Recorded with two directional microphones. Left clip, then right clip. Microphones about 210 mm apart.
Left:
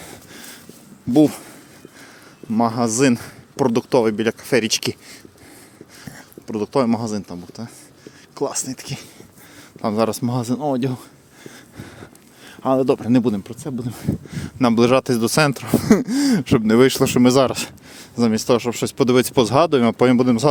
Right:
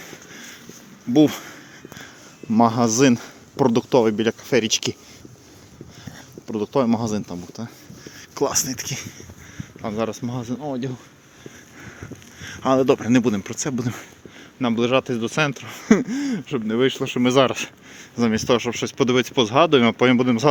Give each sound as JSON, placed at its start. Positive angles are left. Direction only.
{"t": 1.1, "sound": "speech", "side_deg": 15}
{"t": 2.5, "sound": "speech", "side_deg": -5}
{"t": 6.1, "sound": "speech", "side_deg": 10}
{"t": 9.6, "sound": "speech", "side_deg": 35}
{"t": 11.8, "sound": "speech", "side_deg": 20}
{"t": 14.4, "sound": "speech", "side_deg": 40}
{"t": 17.2, "sound": "speech", "side_deg": 25}